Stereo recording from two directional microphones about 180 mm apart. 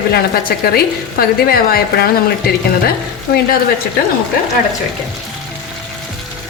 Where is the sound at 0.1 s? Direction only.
60° left (ahead or behind).